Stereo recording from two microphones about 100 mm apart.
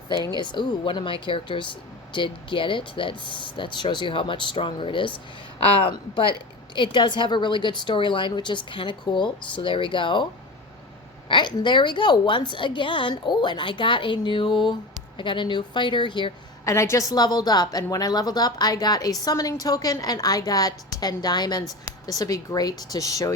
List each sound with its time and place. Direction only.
0.1 s speech: 45° right (ahead or behind)
0.3 s speech: 50° left (ahead or behind)
5.6 s speech: 70° left (ahead or behind)
6.7 s a woman's voice: 55° left (ahead or behind)
11.3 s a woman's voice: 50° left (ahead or behind)
16.6 s a woman's voice: 30° left (ahead or behind)